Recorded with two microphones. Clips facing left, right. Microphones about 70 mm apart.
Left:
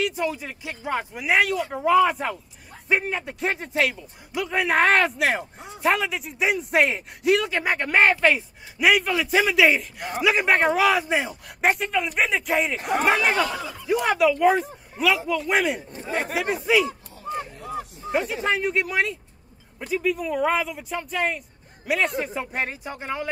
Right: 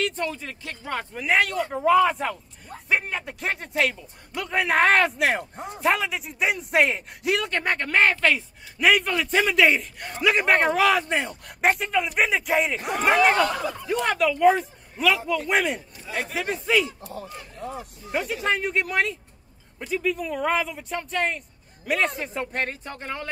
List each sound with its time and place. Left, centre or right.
0.0 s a man's voice: centre
8.7 s a man's voice: centre
15.9 s speech: left
16.6 s a man's voice: centre
18.1 s a man's voice: centre